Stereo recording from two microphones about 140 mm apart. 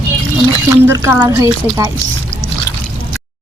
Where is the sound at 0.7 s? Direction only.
20° right (ahead or behind).